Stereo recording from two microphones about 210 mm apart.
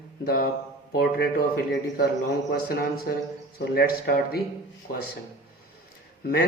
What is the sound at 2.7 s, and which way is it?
Speech, 45° left (ahead or behind).